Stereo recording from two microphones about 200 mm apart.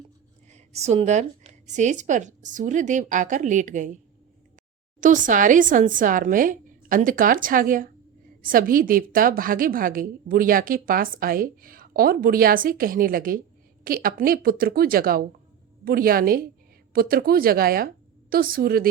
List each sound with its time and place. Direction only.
0.5 s a woman's voice: 35° right (ahead or behind)
4.9 s a woman's voice: 40° right (ahead or behind)